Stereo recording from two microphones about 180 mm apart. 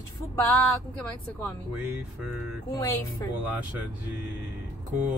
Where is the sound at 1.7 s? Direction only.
10° right (ahead or behind).